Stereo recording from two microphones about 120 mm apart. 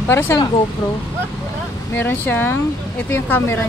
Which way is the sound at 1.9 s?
15° left (ahead or behind).